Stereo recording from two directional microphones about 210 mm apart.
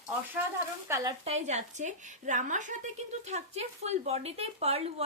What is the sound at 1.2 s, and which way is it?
A woman's voice, 30° right (ahead or behind).